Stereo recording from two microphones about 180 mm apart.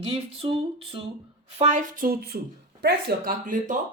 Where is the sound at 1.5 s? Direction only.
45° right (ahead or behind).